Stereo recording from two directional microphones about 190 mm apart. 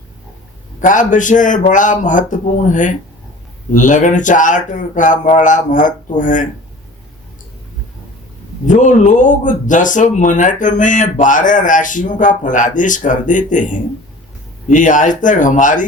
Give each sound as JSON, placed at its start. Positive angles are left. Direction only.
{"t": 0.8, "sound": "speech", "side_deg": 40}
{"t": 8.6, "sound": "speech", "side_deg": 40}